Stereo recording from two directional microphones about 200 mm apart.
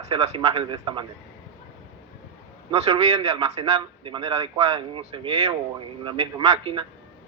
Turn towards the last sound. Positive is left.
turn(degrees=-25)  # may be behind; listen again after turning